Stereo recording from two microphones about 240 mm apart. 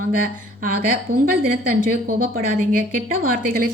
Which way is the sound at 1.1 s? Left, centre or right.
Right.